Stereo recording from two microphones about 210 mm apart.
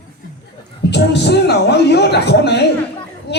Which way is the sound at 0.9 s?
55° left (ahead or behind).